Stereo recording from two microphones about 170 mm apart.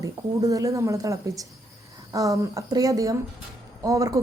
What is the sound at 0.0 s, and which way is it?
A woman's voice, 20° right (ahead or behind).